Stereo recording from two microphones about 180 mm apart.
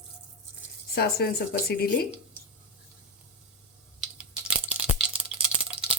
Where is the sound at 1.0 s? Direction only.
60° left (ahead or behind).